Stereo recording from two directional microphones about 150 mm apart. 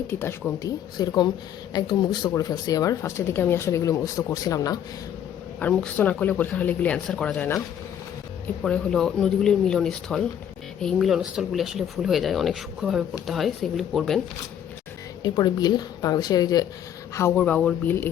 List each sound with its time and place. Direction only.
0.1 s speech: 15° left (ahead or behind)
0.9 s speech: 30° left (ahead or behind)
5.5 s speech: 10° left (ahead or behind)
8.6 s speech: 5° left (ahead or behind)
15.2 s speech: 25° left (ahead or behind)
17.3 s speech: 10° left (ahead or behind)